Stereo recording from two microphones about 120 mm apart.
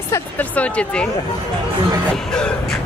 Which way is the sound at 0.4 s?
10° left (ahead or behind).